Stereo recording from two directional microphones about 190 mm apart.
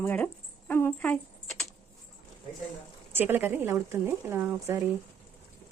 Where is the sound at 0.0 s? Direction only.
10° left (ahead or behind).